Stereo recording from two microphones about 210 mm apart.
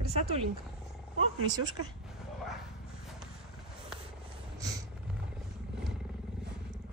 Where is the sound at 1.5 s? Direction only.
20° right (ahead or behind).